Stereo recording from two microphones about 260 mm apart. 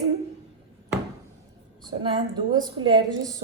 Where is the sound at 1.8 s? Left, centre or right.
Centre.